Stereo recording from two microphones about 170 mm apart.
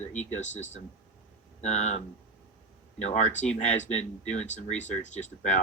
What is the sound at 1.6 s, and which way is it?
Speech, 45° left (ahead or behind).